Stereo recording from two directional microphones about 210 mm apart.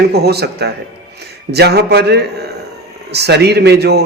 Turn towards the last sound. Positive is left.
turn(degrees=-50)  # may be behind; listen again after turning